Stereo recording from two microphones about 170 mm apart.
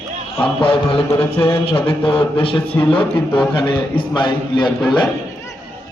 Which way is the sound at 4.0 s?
30° left (ahead or behind).